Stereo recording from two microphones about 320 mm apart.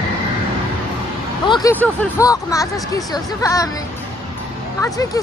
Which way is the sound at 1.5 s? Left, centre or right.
Centre.